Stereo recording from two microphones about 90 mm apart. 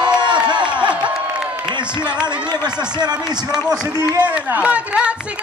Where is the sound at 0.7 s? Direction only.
15° right (ahead or behind).